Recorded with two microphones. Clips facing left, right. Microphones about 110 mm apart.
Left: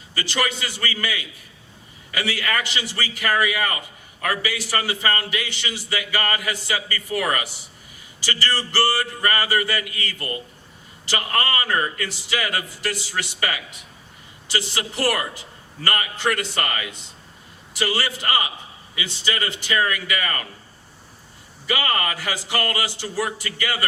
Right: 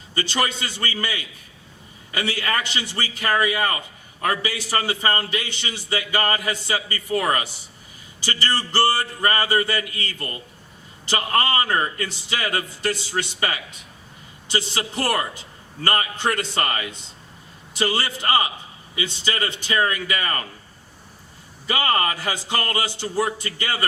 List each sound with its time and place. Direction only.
0.1 s a man's voice: 25° right (ahead or behind)
21.7 s a man's voice: 30° right (ahead or behind)